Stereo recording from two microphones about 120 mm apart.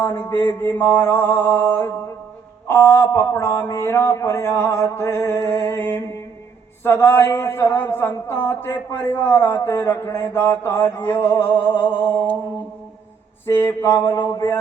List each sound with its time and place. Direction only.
0.0 s a man's voice: 20° left (ahead or behind)
13.5 s a man's voice: 20° left (ahead or behind)